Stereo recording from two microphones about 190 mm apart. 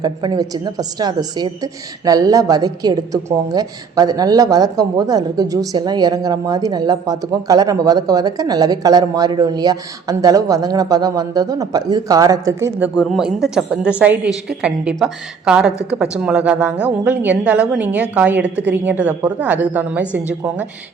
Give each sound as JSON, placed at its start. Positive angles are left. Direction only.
{"t": 0.0, "sound": "a woman's voice", "side_deg": -20}